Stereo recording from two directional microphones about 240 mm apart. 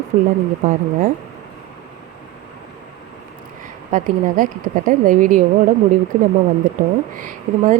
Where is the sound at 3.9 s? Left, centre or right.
Right.